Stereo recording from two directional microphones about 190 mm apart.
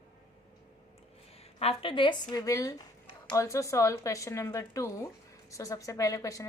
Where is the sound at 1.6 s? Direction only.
30° left (ahead or behind).